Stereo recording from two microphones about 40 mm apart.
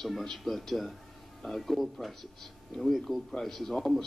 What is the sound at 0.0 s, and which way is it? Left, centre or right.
A man's voice, centre.